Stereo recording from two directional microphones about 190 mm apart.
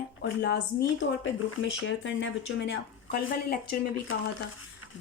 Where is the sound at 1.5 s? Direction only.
85° left; by 3.6 s 55° left (ahead or behind).